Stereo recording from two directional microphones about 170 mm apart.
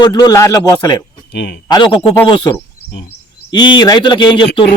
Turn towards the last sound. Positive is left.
turn(degrees=30)  # may be behind; listen again after turning